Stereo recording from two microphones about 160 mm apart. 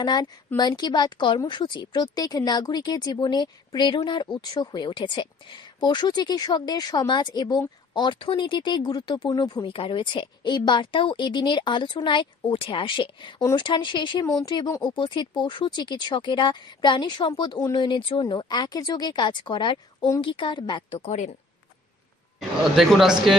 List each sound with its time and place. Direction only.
0.0 s a woman's voice: 25° left (ahead or behind); by 21.3 s 45° left (ahead or behind)
22.4 s speech: centre (ahead or behind)